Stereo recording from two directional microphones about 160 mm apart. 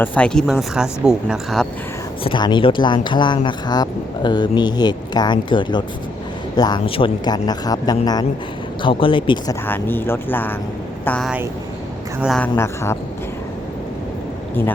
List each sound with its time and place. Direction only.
0.0 s speech: 10° left (ahead or behind)
2.2 s speech: 30° left (ahead or behind)
9.6 s speech: 10° left (ahead or behind)
12.4 s speech: 15° left (ahead or behind)